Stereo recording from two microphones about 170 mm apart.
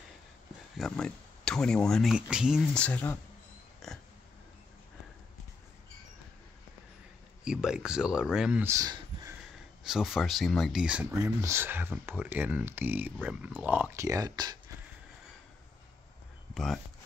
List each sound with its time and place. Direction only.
0.7 s speech: centre (ahead or behind)
2.7 s speech: 10° left (ahead or behind)
3.8 s dog: centre (ahead or behind)
7.4 s speech: 5° right (ahead or behind)
9.8 s speech: centre (ahead or behind); by 14.6 s 25° right (ahead or behind)
16.5 s speech: centre (ahead or behind)